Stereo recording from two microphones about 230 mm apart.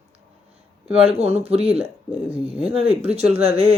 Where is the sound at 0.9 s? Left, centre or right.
Right.